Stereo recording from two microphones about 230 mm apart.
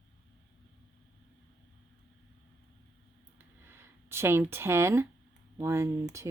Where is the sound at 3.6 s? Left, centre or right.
Centre.